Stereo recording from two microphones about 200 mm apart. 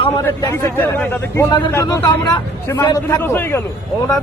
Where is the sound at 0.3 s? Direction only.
10° left (ahead or behind).